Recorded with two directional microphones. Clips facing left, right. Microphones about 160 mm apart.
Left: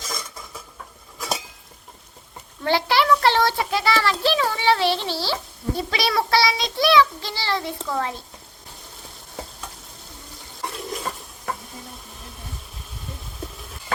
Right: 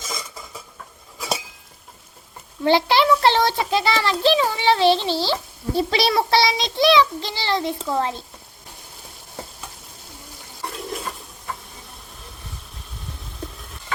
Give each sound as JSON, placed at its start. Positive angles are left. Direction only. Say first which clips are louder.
{"t": 0.0, "sound": "dishes", "louder": "right 1 dB", "side_deg": 0}
{"t": 2.6, "sound": "a child's voice", "louder": "right 3 dB", "side_deg": -20}
{"t": 5.1, "sound": "speech", "louder": "right 4 dB", "side_deg": 10}
{"t": 5.7, "sound": "a child's voice", "louder": "right 4 dB", "side_deg": -30}
{"t": 10.8, "sound": "stir", "louder": "right 2 dB", "side_deg": 0}